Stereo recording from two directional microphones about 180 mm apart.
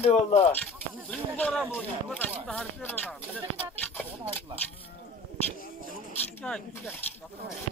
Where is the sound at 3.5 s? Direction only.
10° left (ahead or behind).